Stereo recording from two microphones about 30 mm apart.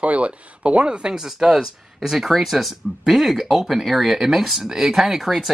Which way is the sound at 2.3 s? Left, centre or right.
Centre.